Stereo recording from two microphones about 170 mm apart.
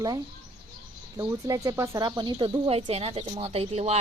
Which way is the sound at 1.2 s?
20° right (ahead or behind).